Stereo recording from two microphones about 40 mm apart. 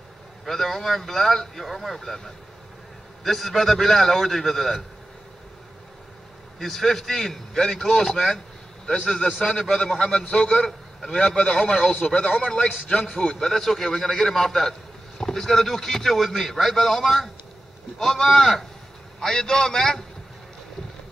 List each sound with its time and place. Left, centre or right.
0.5 s a man's voice: centre
6.6 s a man's voice: centre
11.8 s a man's voice: centre